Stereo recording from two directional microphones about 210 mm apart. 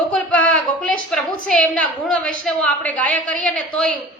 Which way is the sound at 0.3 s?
5° left (ahead or behind).